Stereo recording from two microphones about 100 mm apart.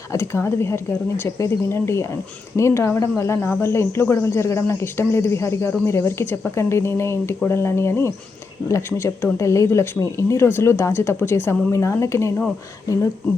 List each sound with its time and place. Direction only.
0.1 s speech: 25° left (ahead or behind)